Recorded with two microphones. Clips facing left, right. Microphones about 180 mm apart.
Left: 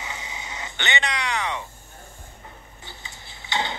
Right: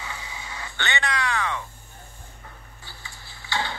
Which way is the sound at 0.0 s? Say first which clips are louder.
Left 1 dB; 20° left (ahead or behind).